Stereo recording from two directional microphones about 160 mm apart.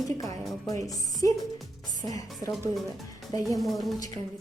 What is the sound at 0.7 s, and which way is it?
A woman's voice, 20° left (ahead or behind).